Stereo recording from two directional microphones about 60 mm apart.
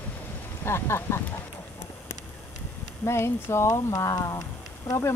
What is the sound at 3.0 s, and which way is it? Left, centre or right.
Speech, left.